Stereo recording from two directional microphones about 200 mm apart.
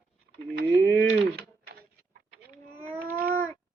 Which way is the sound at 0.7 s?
15° left (ahead or behind).